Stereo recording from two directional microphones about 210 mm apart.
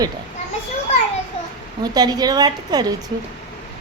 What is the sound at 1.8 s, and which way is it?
Speech, 20° right (ahead or behind).